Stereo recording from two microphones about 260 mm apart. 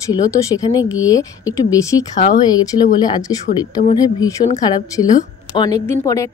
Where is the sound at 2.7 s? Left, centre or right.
Left.